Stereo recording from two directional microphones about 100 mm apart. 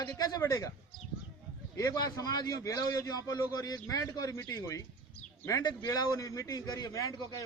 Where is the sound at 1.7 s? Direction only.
35° left (ahead or behind).